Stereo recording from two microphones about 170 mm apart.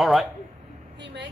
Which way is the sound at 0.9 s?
90° right.